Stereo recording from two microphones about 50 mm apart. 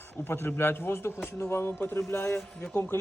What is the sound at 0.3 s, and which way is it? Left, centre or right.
A man's voice, left.